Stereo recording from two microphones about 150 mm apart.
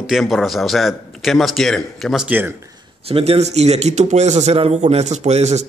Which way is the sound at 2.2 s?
10° right (ahead or behind).